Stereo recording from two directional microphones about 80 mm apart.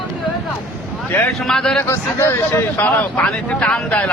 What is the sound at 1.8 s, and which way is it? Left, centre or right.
A man's voice, left.